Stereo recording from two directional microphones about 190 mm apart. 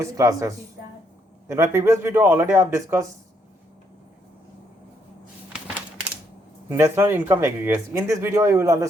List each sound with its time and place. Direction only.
0.0 s speech: 15° right (ahead or behind)
6.7 s speech: 15° right (ahead or behind)